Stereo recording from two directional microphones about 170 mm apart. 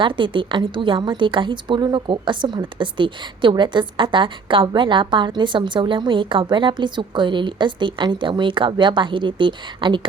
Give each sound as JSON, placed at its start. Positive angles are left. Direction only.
{"t": 0.0, "sound": "a woman's voice", "side_deg": -30}